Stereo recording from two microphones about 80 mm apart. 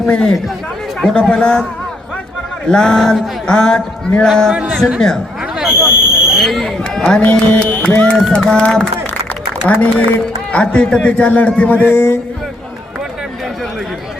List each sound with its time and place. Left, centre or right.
0.0 s a man's voice: centre
2.6 s a man's voice: centre
5.5 s a sound: centre
7.2 s mantra: left
8.1 s a man's voice: centre; by 12.2 s left